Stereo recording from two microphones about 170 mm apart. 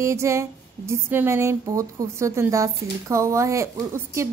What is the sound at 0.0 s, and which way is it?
Speech, 15° right (ahead or behind).